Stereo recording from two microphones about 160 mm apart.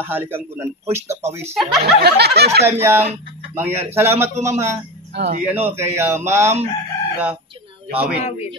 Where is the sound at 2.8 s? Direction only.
15° right (ahead or behind).